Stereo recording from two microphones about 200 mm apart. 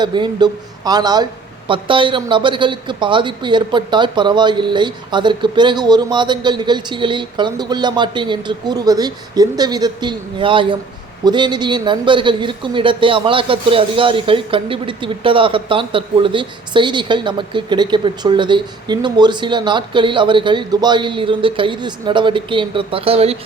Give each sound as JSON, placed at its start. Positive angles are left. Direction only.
{"t": 0.0, "sound": "speech", "side_deg": -20}